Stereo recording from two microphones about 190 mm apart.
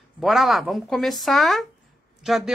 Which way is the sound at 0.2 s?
Centre (ahead or behind).